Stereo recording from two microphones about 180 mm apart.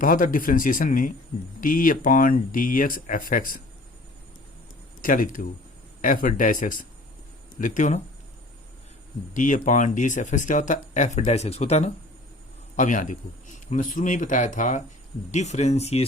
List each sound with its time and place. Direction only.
0.0 s speech: 50° left (ahead or behind)
5.0 s speech: 50° left (ahead or behind)
9.3 s speech: 45° left (ahead or behind)